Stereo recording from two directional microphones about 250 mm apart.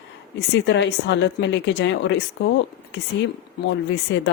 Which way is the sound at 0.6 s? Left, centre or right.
Left.